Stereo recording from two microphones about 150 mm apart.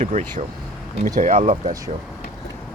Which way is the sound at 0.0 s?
55° right (ahead or behind).